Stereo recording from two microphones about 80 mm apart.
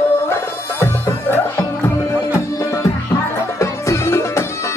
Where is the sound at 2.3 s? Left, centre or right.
Left.